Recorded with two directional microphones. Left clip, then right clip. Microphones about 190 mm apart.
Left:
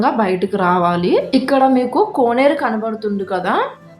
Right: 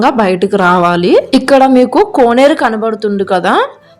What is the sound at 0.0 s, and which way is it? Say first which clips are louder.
A woman's voice: right 6 dB; 40° right (ahead or behind).